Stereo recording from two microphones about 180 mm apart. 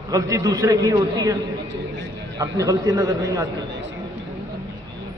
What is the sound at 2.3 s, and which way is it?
A man's voice, 20° right (ahead or behind).